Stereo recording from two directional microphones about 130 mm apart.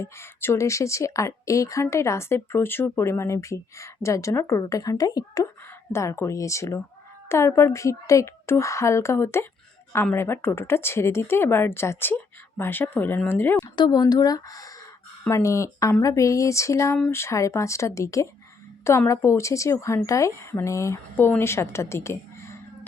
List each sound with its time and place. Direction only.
0.0 s speech: 20° left (ahead or behind)
13.7 s speech: 30° left (ahead or behind)